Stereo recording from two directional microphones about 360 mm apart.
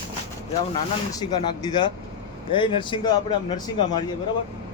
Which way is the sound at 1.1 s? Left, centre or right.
Centre.